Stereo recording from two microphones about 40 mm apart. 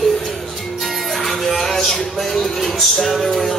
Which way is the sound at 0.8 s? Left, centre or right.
Centre.